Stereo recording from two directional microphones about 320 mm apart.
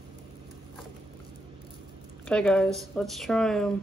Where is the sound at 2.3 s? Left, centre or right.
Centre.